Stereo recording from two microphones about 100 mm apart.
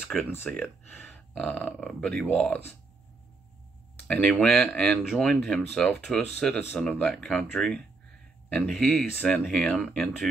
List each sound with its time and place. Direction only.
0.3 s speech: 20° left (ahead or behind)
4.1 s speech: 10° left (ahead or behind)
9.1 s speech: 15° left (ahead or behind)
9.4 s speech: 5° left (ahead or behind)